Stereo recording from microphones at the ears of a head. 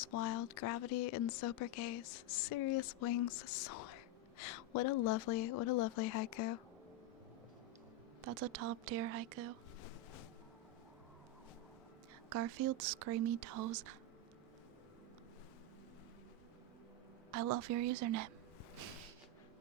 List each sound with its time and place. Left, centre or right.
0.0 s speech: left
8.2 s speech: right
12.3 s speech: right
17.3 s speech: right